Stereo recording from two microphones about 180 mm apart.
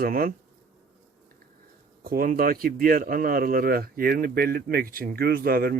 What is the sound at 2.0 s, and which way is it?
Speech, 55° right (ahead or behind).